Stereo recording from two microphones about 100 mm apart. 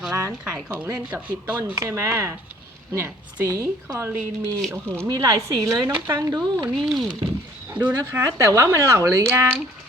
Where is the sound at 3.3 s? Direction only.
35° right (ahead or behind).